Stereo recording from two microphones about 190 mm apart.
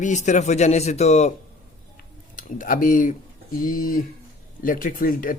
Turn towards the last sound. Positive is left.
turn(degrees=45)  # may be behind; listen again after turning